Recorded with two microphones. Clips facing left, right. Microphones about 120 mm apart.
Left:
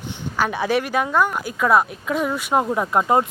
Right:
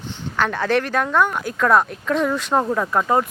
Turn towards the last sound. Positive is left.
turn(degrees=20)  # may be behind; listen again after turning